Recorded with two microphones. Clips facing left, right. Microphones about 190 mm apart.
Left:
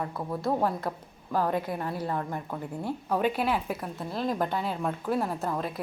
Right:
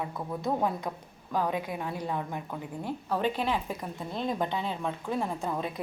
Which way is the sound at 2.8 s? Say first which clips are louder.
Left 2 dB; 10° left (ahead or behind).